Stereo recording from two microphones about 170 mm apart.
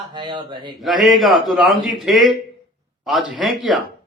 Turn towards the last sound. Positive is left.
turn(degrees=0)  # may be behind; listen again after turning